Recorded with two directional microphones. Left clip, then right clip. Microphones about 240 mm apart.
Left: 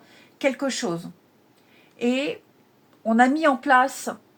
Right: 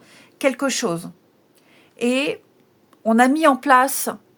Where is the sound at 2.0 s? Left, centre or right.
Right.